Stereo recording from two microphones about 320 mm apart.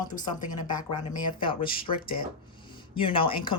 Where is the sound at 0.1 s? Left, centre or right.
Left.